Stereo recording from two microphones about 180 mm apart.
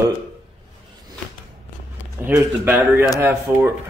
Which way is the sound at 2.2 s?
15° right (ahead or behind).